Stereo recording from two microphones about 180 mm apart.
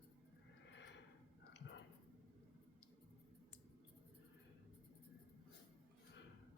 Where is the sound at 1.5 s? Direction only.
75° left (ahead or behind).